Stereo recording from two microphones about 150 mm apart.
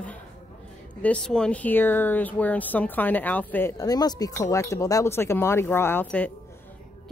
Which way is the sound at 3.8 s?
25° left (ahead or behind).